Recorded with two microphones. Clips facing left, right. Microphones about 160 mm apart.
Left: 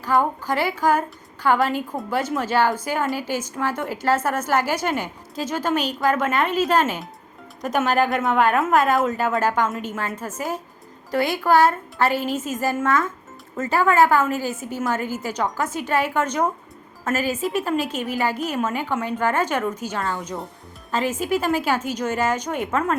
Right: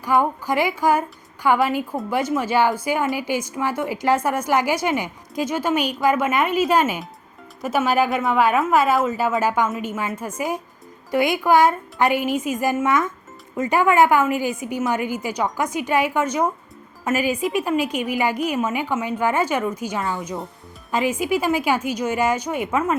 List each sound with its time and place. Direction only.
0.0 s a woman's voice: 10° right (ahead or behind)
20.9 s a woman's voice: 10° right (ahead or behind)